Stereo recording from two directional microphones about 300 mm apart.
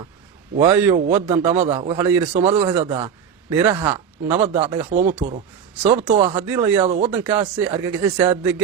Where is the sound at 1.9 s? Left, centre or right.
Centre.